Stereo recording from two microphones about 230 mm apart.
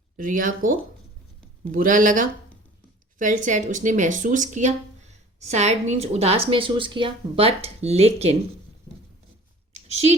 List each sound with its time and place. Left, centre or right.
0.2 s a woman's voice: right
9.9 s a woman's voice: right